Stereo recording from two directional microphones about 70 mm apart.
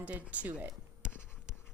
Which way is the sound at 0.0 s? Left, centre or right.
Centre.